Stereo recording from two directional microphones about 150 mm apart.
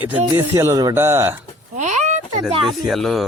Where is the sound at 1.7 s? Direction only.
55° right (ahead or behind).